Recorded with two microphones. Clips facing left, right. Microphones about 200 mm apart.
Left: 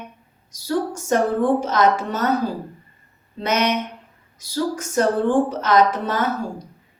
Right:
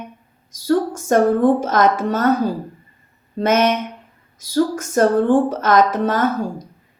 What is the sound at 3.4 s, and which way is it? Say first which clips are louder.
A woman's voice: right 5 dB; 50° right (ahead or behind).